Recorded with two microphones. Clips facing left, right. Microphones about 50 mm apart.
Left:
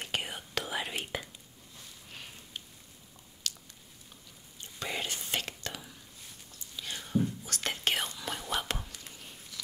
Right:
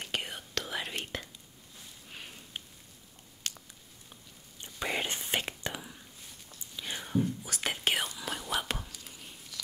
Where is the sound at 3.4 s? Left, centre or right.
Right.